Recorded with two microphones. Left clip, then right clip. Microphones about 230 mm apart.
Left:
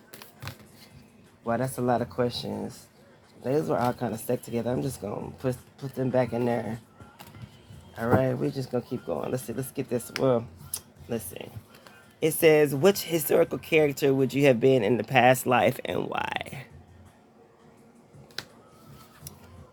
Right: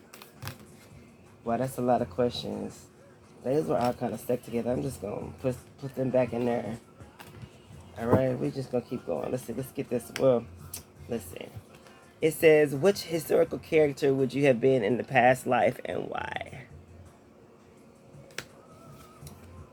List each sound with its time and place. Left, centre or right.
1.5 s speech: left
7.9 s speech: left
10.2 s a sound: left
12.2 s speech: left